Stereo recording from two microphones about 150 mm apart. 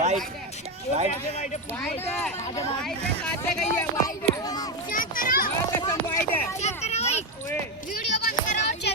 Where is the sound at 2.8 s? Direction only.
5° left (ahead or behind).